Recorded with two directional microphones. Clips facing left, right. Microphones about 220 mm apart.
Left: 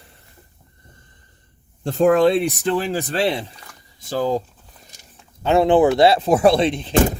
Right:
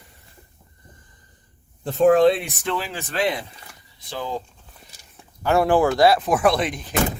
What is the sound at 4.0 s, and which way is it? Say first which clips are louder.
Speech: left 8 dB; 40° left (ahead or behind).